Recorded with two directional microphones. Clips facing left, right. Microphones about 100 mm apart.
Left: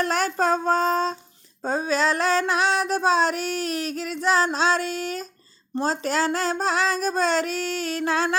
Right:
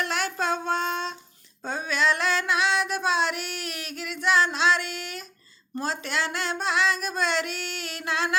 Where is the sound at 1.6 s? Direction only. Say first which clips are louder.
Left 3 dB; 35° left (ahead or behind).